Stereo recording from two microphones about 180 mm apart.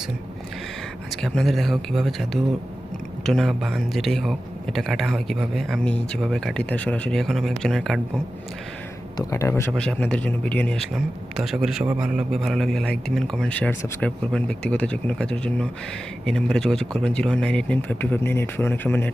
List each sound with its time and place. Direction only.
1.1 s speech: centre (ahead or behind)
9.1 s speech: 15° left (ahead or behind)